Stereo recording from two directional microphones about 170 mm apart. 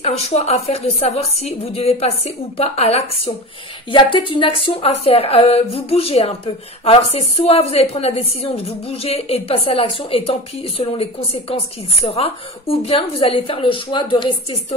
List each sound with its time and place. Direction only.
0.0 s speech: 40° left (ahead or behind)